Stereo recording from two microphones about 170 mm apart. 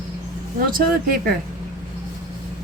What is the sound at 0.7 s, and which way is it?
Speech, 60° right (ahead or behind).